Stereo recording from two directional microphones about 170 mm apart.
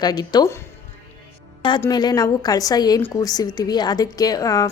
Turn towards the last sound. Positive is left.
turn(degrees=20)  # may be behind; listen again after turning